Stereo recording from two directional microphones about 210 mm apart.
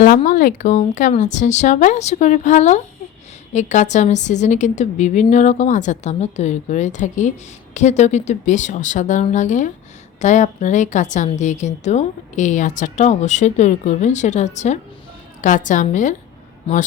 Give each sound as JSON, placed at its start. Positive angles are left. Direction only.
{"t": 0.2, "sound": "a woman's voice", "side_deg": 35}